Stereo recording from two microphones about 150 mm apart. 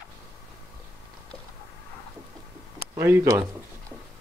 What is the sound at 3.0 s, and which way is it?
Speech, 15° right (ahead or behind).